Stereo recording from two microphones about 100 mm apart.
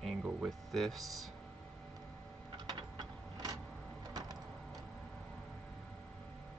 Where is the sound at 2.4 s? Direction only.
50° right (ahead or behind).